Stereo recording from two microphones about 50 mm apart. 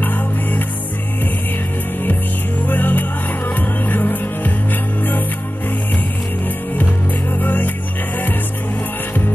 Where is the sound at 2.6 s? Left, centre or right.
Left.